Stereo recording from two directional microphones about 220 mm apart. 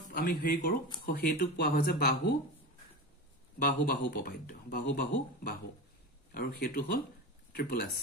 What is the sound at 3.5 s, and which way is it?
Speech, 40° left (ahead or behind).